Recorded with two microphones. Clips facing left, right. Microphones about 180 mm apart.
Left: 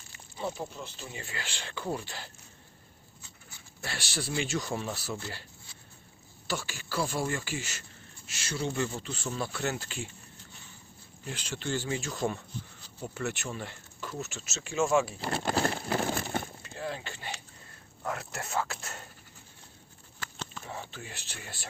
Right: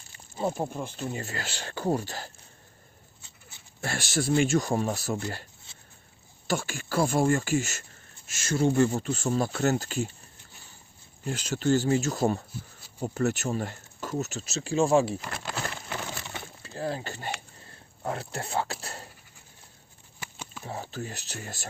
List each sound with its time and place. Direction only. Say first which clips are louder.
0.3 s speech: right 6 dB; 50° right (ahead or behind)
3.8 s speech: right 8 dB; 45° right (ahead or behind)
5.7 s a sound: left 1 dB; 25° right (ahead or behind)
6.5 s speech: right 6 dB; 50° right (ahead or behind)
11.3 s speech: right 9 dB; 40° right (ahead or behind)
15.2 s speech: left 5 dB; 30° left (ahead or behind)
15.5 s a sound: left 8 dB; 35° left (ahead or behind)
16.0 s a sound: left 6 dB; 50° left (ahead or behind)
16.6 s speech: right 5 dB; 35° right (ahead or behind)
18.0 s speech: right 3 dB; 30° right (ahead or behind)
20.1 s a sound: even; 10° right (ahead or behind)
20.7 s speech: right 9 dB; 35° right (ahead or behind)